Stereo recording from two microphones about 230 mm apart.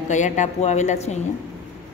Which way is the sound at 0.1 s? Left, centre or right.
Left.